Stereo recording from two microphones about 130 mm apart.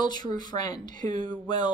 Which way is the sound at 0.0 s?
35° left (ahead or behind).